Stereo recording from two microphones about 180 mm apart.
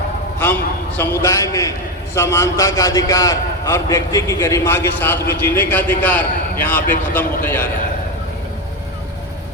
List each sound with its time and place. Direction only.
0.3 s a man's voice: 10° left (ahead or behind)